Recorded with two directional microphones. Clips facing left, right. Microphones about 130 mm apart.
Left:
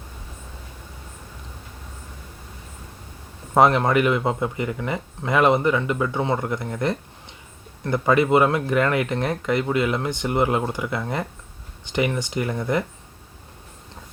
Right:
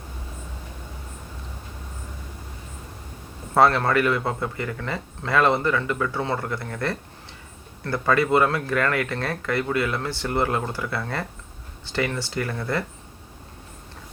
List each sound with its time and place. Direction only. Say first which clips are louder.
3.5 s speech: left 2 dB; 20° left (ahead or behind)